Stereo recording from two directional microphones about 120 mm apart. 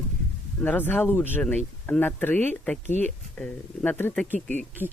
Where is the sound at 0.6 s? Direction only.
15° left (ahead or behind).